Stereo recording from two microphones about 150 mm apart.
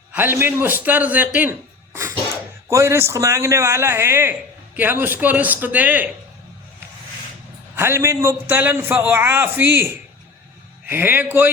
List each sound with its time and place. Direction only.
0.1 s a man's voice: 15° right (ahead or behind)
7.8 s a man's voice: 15° right (ahead or behind)